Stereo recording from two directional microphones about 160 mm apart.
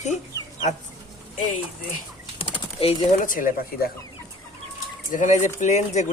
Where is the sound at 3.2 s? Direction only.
60° left (ahead or behind).